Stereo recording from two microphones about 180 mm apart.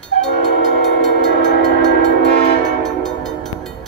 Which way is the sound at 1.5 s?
70° left (ahead or behind).